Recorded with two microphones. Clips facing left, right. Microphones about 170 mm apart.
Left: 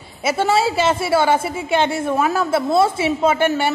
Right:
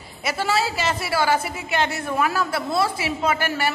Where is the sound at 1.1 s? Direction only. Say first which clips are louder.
Left 3 dB; 25° left (ahead or behind).